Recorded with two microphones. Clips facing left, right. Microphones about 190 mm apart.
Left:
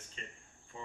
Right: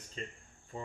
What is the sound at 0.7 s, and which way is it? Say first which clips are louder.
Cricket: right 4 dB; 35° right (ahead or behind).